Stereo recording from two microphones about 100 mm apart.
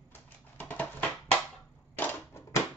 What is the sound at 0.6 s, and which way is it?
Music, 15° left (ahead or behind).